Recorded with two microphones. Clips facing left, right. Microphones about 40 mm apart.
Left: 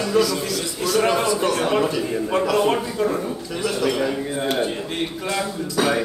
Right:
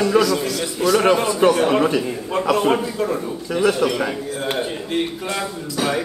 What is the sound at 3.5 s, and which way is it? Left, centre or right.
Speech, right.